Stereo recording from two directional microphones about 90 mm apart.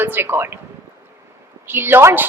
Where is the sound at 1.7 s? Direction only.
25° right (ahead or behind).